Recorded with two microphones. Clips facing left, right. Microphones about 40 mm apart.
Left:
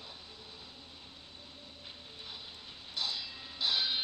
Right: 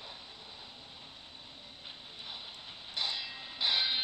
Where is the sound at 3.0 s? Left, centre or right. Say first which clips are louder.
Right 1 dB; centre.